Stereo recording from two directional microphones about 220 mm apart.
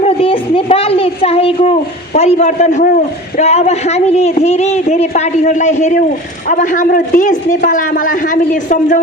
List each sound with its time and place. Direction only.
0.0 s a woman's voice: 25° left (ahead or behind)